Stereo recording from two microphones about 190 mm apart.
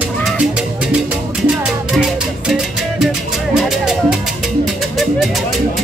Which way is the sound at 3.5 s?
5° right (ahead or behind).